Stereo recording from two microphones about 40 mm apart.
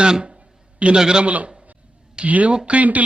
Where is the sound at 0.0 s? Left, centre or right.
Right.